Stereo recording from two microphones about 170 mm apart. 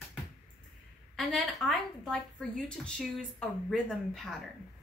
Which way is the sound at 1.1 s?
Centre (ahead or behind).